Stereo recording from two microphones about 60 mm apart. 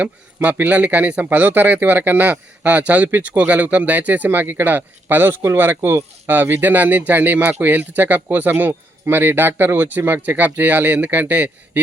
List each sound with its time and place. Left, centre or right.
0.3 s speech: right